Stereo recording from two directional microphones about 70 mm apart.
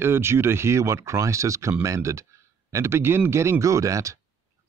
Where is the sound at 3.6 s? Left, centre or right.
Right.